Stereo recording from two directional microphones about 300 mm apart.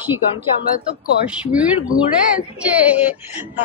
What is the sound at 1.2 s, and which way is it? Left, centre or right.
Speech, centre.